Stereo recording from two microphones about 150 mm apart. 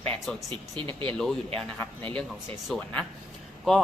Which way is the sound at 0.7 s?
30° right (ahead or behind).